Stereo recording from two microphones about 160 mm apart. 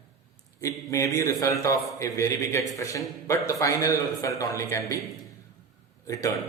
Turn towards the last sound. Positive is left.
turn(degrees=20)  # may be behind; listen again after turning